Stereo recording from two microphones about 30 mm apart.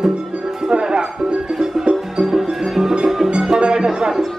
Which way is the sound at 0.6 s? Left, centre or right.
Right.